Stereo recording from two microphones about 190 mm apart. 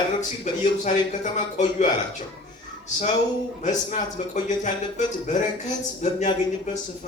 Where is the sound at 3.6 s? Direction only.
40° left (ahead or behind).